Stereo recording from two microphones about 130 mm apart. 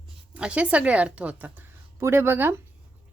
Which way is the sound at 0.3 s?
10° right (ahead or behind).